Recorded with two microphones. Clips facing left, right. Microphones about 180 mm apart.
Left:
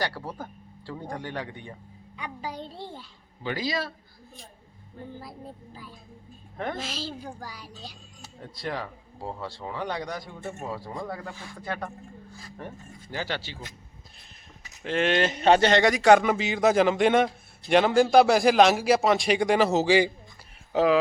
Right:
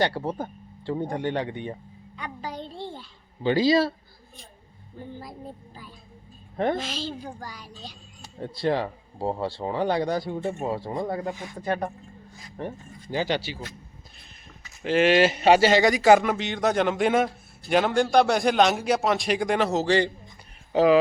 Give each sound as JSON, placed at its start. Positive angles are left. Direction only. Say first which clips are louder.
{"t": 0.0, "sound": "speech", "louder": "right 6 dB", "side_deg": -25}
{"t": 2.1, "sound": "a sound", "louder": "right 1 dB", "side_deg": 10}
{"t": 3.4, "sound": "speech", "louder": "right 10 dB", "side_deg": -30}
{"t": 6.7, "sound": "a man's voice", "louder": "right 3 dB", "side_deg": 5}
{"t": 8.4, "sound": "speech", "louder": "right 8 dB", "side_deg": -30}
{"t": 14.8, "sound": "a man's voice", "louder": "right 5 dB", "side_deg": -5}